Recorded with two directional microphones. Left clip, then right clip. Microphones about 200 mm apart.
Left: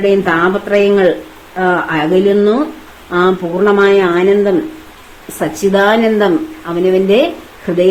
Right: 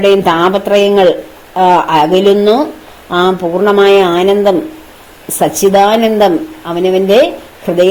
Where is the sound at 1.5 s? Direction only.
30° right (ahead or behind).